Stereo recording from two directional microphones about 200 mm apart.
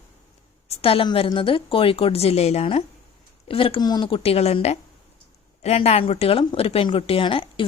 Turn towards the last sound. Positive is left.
turn(degrees=25)  # may be behind; listen again after turning